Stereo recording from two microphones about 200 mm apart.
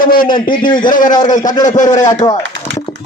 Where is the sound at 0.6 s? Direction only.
25° left (ahead or behind).